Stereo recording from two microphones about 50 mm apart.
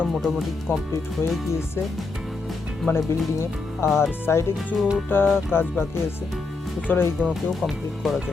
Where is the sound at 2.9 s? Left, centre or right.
Left.